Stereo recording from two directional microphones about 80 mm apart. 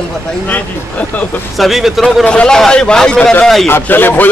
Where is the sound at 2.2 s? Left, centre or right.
Centre.